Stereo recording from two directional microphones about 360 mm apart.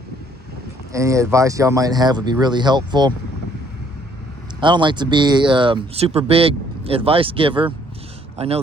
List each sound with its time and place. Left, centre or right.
0.9 s speech: centre
4.6 s speech: centre